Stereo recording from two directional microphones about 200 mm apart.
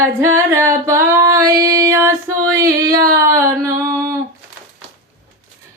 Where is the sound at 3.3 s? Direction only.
15° right (ahead or behind).